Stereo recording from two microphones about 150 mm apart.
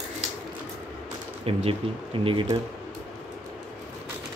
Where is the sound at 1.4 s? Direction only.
40° right (ahead or behind).